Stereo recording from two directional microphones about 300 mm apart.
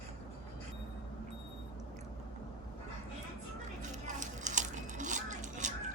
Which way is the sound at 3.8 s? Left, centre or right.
Right.